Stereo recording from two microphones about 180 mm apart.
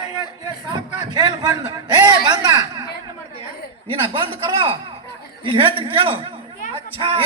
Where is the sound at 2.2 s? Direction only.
25° right (ahead or behind).